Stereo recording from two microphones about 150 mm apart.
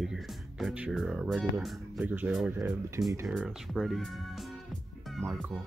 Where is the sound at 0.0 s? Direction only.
Centre (ahead or behind).